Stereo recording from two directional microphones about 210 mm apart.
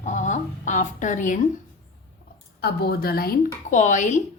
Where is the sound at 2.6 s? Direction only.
50° left (ahead or behind).